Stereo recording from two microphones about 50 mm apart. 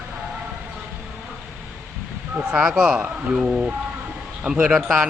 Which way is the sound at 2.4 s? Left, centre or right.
Centre.